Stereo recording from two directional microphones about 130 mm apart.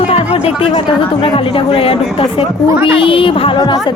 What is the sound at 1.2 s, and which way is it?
A woman's voice, 45° left (ahead or behind).